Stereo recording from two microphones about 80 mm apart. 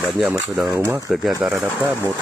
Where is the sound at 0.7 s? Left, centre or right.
Right.